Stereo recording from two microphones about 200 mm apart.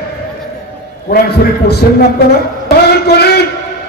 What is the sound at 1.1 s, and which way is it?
Speech, 50° left (ahead or behind).